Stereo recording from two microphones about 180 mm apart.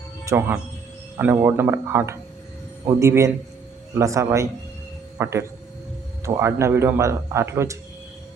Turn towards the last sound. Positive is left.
turn(degrees=-15)  # may be behind; listen again after turning